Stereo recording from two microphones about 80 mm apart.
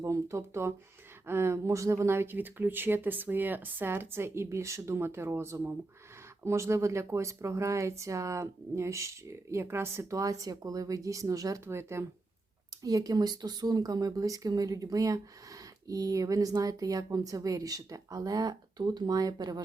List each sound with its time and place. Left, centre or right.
0.0 s speech: right
11.6 s speech: right
12.8 s a woman's voice: right